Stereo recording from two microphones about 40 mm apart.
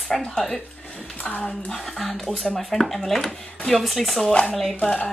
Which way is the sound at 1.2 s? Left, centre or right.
Left.